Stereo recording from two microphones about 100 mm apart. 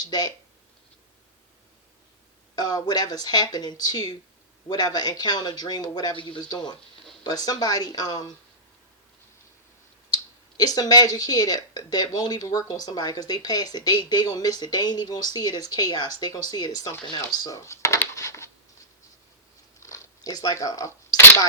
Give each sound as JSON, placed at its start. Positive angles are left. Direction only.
{"t": 2.6, "sound": "speech", "side_deg": 45}
{"t": 6.1, "sound": "speech", "side_deg": 55}
{"t": 7.3, "sound": "speech", "side_deg": 40}
{"t": 10.6, "sound": "speech", "side_deg": 40}
{"t": 17.5, "sound": "a sound", "side_deg": 30}
{"t": 19.8, "sound": "a sound", "side_deg": 35}